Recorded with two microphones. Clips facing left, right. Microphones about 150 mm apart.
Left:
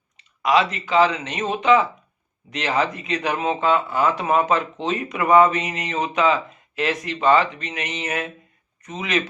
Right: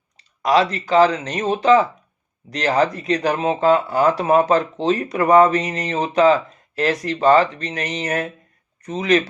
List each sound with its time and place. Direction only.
0.2 s speech: 35° right (ahead or behind)